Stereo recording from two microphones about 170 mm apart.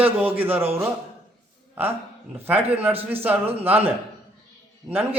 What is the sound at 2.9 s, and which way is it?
Speech, 35° right (ahead or behind).